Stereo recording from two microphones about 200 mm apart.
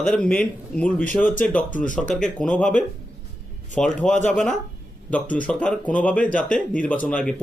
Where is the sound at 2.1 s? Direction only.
5° left (ahead or behind).